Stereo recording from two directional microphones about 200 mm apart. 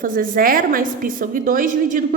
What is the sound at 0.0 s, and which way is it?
A woman's voice, 45° right (ahead or behind).